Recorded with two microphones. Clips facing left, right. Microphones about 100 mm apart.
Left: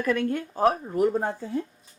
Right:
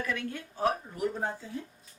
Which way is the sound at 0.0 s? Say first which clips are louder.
Left 10 dB; 45° left (ahead or behind).